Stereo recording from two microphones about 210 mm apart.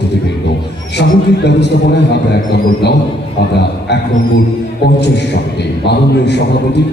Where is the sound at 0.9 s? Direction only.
55° left (ahead or behind).